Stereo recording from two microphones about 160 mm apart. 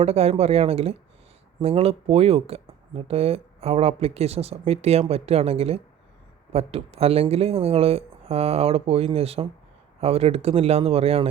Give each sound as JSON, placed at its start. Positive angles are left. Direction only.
{"t": 0.0, "sound": "speech", "side_deg": -40}